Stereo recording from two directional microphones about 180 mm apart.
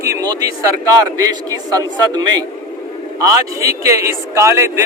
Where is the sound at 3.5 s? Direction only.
20° right (ahead or behind).